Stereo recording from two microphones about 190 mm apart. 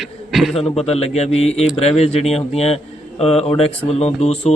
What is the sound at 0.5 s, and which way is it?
Speech, 30° left (ahead or behind).